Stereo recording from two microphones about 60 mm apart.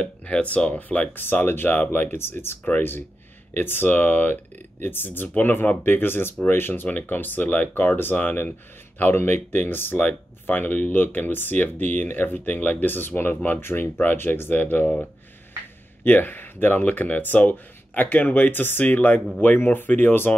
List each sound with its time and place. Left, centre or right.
0.2 s speech: left
1.1 s speech: left
2.6 s speech: left
16.0 s speech: left